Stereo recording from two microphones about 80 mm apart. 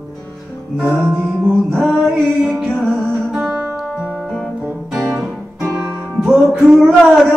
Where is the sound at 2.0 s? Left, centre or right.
Centre.